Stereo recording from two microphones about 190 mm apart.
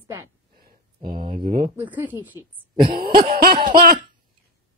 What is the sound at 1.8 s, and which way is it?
Speech, 10° right (ahead or behind).